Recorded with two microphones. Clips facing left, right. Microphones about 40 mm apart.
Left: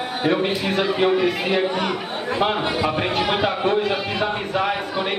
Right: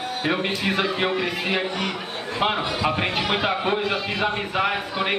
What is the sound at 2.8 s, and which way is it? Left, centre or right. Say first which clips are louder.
A man's voice: even; centre.